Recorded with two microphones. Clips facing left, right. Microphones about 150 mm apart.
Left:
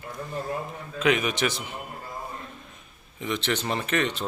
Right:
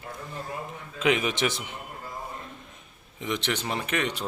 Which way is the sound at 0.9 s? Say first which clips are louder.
Left 1 dB; 25° right (ahead or behind).